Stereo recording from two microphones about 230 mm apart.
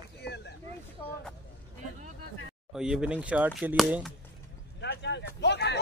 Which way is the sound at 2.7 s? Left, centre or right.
Centre.